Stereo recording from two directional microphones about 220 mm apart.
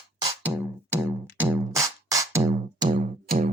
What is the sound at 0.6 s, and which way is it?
Music, 10° right (ahead or behind).